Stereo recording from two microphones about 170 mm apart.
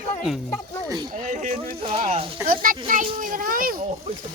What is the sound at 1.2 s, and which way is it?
Speech, 45° right (ahead or behind).